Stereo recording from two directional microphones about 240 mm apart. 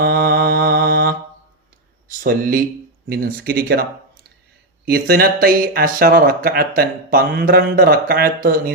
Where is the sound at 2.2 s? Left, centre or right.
Right.